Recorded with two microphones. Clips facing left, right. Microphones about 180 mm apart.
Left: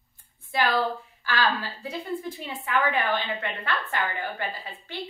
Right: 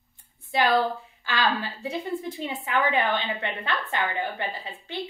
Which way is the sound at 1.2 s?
20° right (ahead or behind).